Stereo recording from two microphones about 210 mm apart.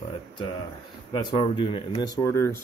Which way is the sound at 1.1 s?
20° left (ahead or behind).